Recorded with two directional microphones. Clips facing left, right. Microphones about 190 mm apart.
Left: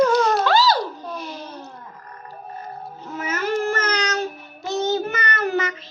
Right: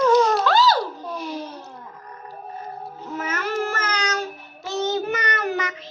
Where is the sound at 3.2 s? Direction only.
Centre (ahead or behind).